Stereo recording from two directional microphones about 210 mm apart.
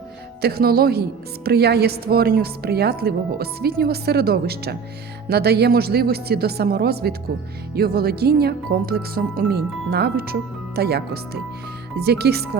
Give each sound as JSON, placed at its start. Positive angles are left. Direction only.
{"t": 0.4, "sound": "a woman's voice", "side_deg": -45}